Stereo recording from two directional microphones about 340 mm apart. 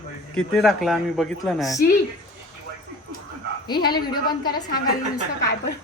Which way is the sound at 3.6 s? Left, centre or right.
Centre.